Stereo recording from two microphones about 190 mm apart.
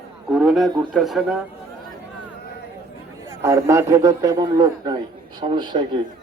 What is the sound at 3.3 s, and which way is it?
A man's voice, 15° right (ahead or behind).